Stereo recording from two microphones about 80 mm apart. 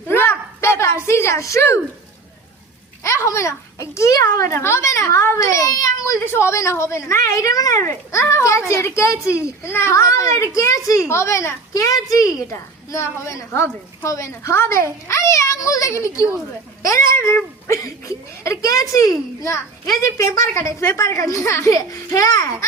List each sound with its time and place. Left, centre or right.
0.1 s a sound: left
3.0 s a woman's voice: left
6.2 s a woman's voice: left